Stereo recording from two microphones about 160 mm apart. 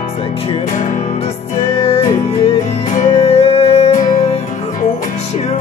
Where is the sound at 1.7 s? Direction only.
35° left (ahead or behind).